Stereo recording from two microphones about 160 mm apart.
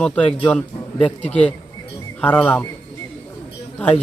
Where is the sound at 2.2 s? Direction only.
10° left (ahead or behind).